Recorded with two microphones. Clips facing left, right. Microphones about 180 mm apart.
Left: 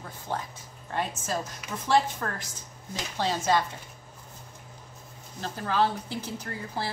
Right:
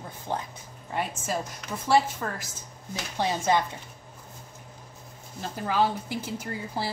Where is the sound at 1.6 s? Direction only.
10° left (ahead or behind).